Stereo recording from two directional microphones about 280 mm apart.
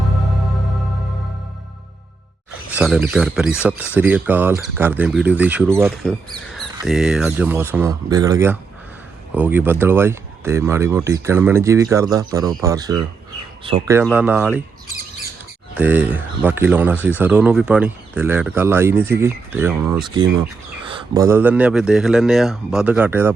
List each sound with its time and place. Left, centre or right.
2.7 s a man's voice: centre
15.8 s a man's voice: centre
20.1 s a man's voice: centre